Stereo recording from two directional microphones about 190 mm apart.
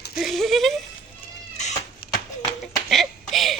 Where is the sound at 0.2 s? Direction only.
Centre (ahead or behind).